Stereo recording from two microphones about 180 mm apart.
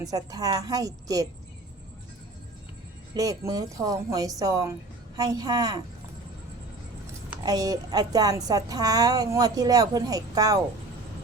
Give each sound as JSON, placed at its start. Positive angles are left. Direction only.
{"t": 0.0, "sound": "a woman's voice", "side_deg": -20}
{"t": 3.2, "sound": "a woman's voice", "side_deg": -20}
{"t": 7.4, "sound": "a woman's voice", "side_deg": -20}